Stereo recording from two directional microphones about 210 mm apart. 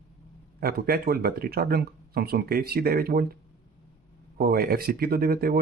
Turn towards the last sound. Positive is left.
turn(degrees=-45)  # may be behind; listen again after turning